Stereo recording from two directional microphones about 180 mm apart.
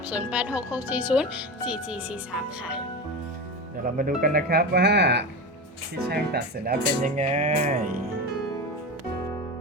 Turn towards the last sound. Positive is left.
turn(degrees=-40)  # may be behind; listen again after turning